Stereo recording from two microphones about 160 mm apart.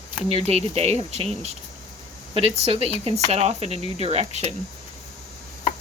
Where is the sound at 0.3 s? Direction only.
40° right (ahead or behind).